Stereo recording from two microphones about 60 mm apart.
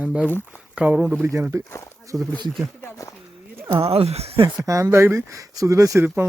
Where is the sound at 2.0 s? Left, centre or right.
Right.